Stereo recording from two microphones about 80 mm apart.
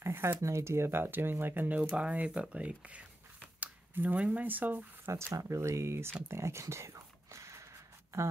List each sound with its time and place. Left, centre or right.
0.0 s speech: right
5.3 s speech: right
6.2 s whispering: right